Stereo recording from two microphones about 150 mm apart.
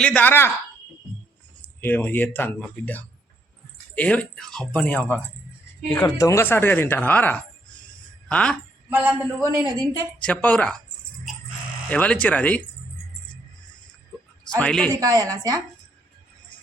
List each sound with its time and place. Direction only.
0.0 s speech: 10° left (ahead or behind)
1.6 s speech: 15° left (ahead or behind)
8.9 s a man's voice: 10° right (ahead or behind)
9.6 s speech: 25° right (ahead or behind)
10.2 s speech: 10° left (ahead or behind)
11.9 s speech: 10° left (ahead or behind)
14.5 s speech: 5° left (ahead or behind)
14.8 s speech: 25° right (ahead or behind)